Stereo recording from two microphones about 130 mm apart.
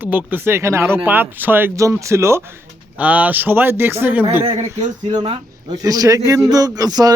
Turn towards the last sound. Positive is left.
turn(degrees=-30)  # may be behind; listen again after turning